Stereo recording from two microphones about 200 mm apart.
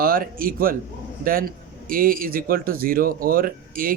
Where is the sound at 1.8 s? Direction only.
45° right (ahead or behind).